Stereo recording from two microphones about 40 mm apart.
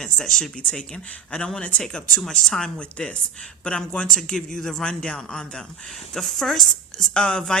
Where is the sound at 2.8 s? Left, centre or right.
Left.